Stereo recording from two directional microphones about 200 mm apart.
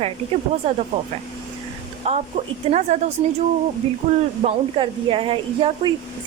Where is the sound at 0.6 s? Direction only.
30° right (ahead or behind).